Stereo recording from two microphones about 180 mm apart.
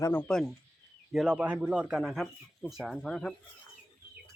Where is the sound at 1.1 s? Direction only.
5° right (ahead or behind).